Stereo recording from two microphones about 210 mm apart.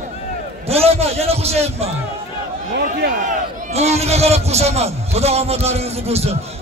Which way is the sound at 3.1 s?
35° right (ahead or behind).